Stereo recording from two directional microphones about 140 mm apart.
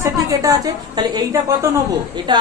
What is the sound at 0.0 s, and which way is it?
A woman's voice, 25° right (ahead or behind).